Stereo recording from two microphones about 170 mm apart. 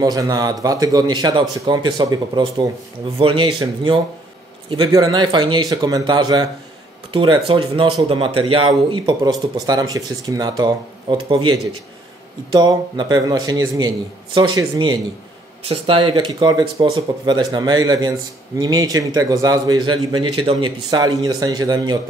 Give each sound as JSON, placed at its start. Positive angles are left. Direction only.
{"t": 0.0, "sound": "speech", "side_deg": -20}